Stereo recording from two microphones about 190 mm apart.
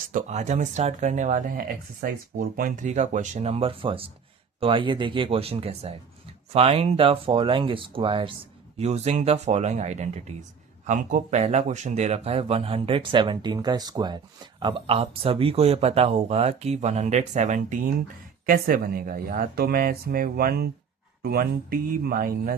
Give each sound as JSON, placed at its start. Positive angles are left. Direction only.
{"t": 0.1, "sound": "speech", "side_deg": -40}